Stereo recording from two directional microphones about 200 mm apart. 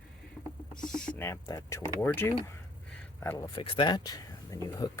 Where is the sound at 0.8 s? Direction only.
5° left (ahead or behind).